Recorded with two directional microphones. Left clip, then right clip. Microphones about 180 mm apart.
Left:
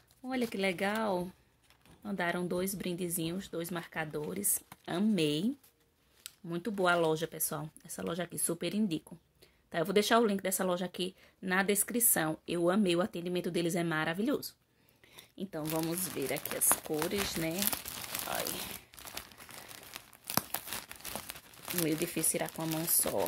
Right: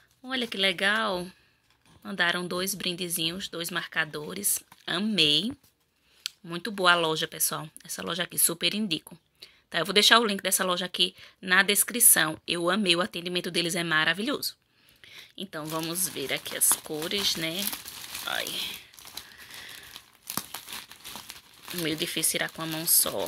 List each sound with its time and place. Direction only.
0.3 s speech: 5° left (ahead or behind)
15.0 s a sound: 5° left (ahead or behind)
15.7 s speech: 15° right (ahead or behind)
16.0 s speech: 5° left (ahead or behind)
20.2 s crumpling: 35° left (ahead or behind)
21.8 s speech: centre (ahead or behind)